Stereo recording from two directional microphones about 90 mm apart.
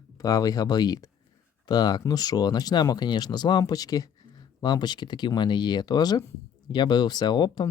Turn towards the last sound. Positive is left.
turn(degrees=55)  # may be behind; listen again after turning